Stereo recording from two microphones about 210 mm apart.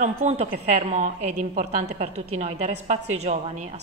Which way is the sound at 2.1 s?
90° right.